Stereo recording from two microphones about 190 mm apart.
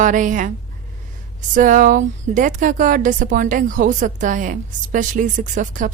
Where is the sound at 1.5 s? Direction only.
45° right (ahead or behind).